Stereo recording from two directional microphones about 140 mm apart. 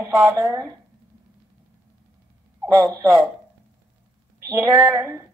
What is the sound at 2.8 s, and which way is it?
Speech, 20° right (ahead or behind).